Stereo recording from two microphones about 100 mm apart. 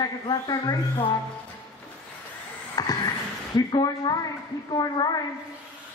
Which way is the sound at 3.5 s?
45° left (ahead or behind).